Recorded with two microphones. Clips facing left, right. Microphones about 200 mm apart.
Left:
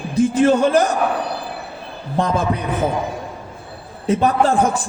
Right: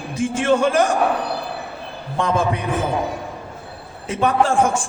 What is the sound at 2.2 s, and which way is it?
Speech, 35° left (ahead or behind).